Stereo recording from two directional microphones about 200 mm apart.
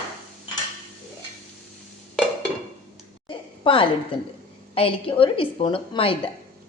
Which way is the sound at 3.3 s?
25° left (ahead or behind).